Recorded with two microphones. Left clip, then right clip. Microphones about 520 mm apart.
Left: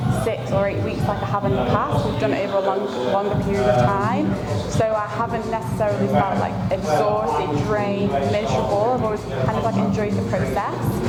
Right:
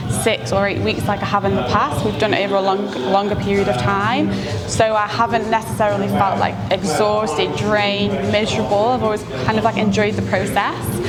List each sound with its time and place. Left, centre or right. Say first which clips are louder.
1.3 s a woman's voice: right 4 dB; centre
3.9 s a woman's voice: right 4 dB; centre
9.5 s a woman's voice: right 7 dB; right